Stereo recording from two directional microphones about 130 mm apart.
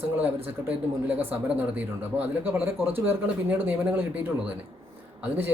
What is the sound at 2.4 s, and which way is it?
Speech, 15° right (ahead or behind).